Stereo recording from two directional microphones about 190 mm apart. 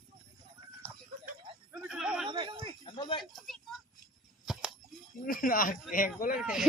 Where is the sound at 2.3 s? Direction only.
25° right (ahead or behind).